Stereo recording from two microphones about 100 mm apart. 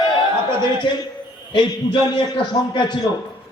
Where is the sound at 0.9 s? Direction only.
50° left (ahead or behind).